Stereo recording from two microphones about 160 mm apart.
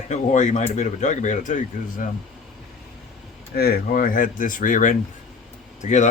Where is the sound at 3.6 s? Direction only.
70° left (ahead or behind); by 6.0 s 50° left (ahead or behind).